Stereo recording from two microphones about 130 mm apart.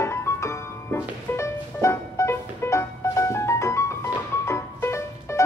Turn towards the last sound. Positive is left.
turn(degrees=20)  # may be behind; listen again after turning